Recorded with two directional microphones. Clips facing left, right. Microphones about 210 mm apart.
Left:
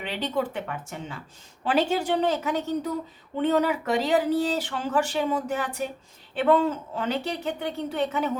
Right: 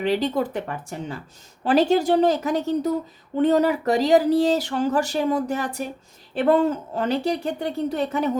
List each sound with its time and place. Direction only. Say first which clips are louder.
0.0 s speech: right 6 dB; 40° right (ahead or behind)